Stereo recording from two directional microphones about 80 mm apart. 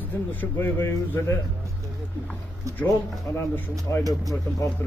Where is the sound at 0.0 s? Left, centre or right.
Left.